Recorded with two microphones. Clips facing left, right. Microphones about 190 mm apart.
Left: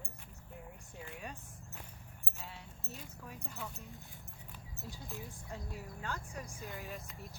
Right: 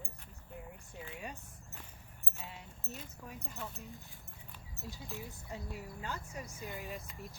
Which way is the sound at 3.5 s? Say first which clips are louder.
Right 1 dB; centre (ahead or behind).